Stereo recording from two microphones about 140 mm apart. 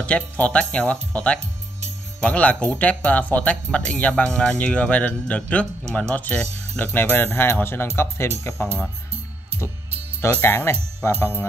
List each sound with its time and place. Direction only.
0.0 s speech: 10° left (ahead or behind)
10.2 s speech: 15° left (ahead or behind)